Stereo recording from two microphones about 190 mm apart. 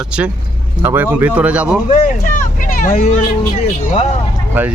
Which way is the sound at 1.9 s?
45° left (ahead or behind).